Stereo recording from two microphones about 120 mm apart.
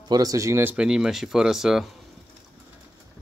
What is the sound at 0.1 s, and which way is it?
Speech, 30° right (ahead or behind).